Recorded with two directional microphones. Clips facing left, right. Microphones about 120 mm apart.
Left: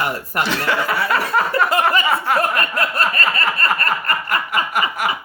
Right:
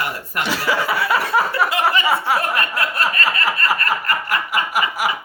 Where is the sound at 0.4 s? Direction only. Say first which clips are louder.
Right 1 dB; 5° right (ahead or behind).